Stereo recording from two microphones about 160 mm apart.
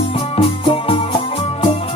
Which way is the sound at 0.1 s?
35° left (ahead or behind).